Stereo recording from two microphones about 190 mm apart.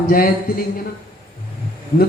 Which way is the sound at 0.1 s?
50° left (ahead or behind).